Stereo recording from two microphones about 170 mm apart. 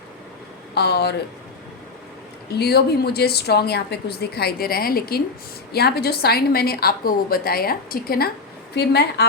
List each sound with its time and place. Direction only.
0.7 s speech: 75° left (ahead or behind)
2.5 s a woman's voice: 70° left (ahead or behind)
8.7 s a woman's voice: 75° left (ahead or behind)